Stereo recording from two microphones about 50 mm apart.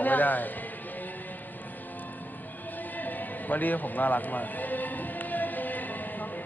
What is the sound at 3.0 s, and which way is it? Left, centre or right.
Speech, left.